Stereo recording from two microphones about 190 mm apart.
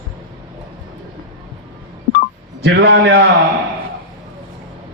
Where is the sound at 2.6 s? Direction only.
65° right (ahead or behind).